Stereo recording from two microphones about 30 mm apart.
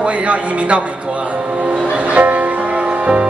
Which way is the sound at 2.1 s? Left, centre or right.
Right.